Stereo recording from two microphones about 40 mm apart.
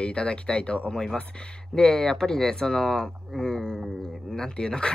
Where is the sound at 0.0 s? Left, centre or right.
Left.